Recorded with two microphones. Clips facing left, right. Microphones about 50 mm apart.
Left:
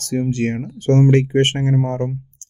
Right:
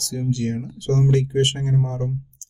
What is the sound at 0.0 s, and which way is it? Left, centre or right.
Speech, left.